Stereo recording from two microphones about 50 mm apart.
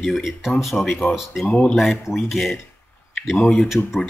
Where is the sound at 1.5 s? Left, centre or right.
Left.